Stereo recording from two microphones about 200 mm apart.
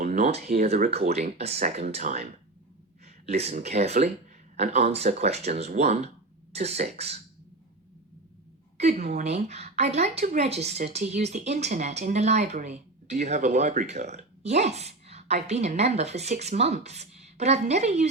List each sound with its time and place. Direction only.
0.0 s a woman's voice: 35° right (ahead or behind)
3.2 s a woman's voice: 30° right (ahead or behind)
8.8 s a woman's voice: 35° right (ahead or behind)